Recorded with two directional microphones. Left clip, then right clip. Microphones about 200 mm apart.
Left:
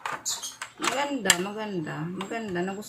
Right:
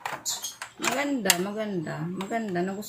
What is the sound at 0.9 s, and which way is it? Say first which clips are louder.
Speech: even; 5° left (ahead or behind).